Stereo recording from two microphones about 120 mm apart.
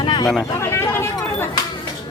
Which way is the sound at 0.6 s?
20° left (ahead or behind).